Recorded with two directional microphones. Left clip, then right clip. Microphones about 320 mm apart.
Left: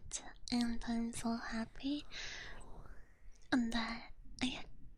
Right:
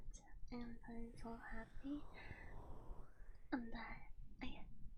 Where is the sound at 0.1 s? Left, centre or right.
Left.